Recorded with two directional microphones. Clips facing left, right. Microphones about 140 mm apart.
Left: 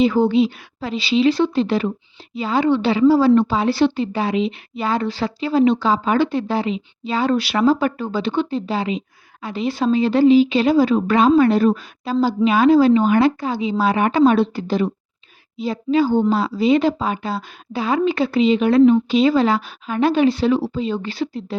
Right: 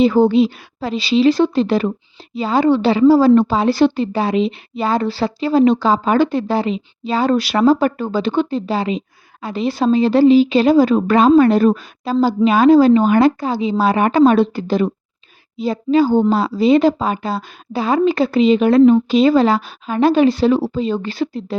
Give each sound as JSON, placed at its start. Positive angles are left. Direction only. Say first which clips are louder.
{"t": 0.0, "sound": "speech", "louder": "right 3 dB", "side_deg": -40}